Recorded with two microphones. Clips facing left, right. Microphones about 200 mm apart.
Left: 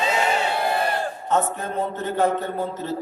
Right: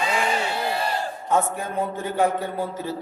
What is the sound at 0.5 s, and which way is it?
Crowd, 55° left (ahead or behind).